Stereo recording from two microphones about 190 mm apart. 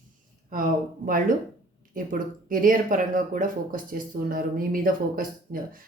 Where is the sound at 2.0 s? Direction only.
45° right (ahead or behind).